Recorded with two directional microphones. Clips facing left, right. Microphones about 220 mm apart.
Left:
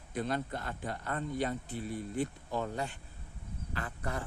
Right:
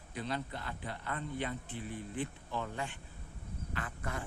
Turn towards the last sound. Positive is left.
turn(degrees=35)  # may be behind; listen again after turning